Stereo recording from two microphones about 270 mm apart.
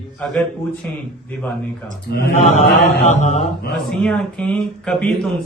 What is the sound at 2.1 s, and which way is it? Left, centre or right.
Speech, left.